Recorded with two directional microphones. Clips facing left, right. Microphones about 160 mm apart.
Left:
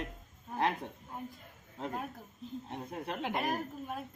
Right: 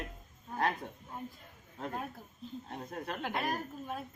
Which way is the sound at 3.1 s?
20° left (ahead or behind).